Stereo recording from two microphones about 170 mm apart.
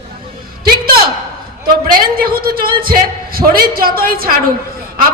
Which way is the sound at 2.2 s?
60° right (ahead or behind).